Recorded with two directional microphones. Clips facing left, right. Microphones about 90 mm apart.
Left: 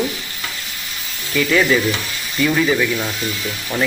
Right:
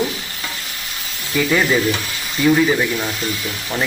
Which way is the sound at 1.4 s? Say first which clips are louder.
Left 1 dB; 20° right (ahead or behind).